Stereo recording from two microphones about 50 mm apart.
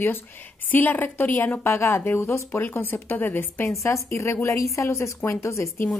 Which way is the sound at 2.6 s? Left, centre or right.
Left.